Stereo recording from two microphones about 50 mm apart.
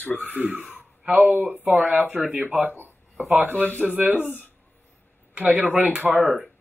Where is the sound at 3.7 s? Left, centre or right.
Right.